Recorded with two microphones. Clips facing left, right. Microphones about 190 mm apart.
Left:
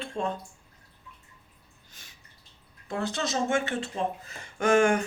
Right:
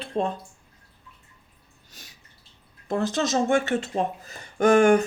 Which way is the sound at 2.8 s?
40° right (ahead or behind).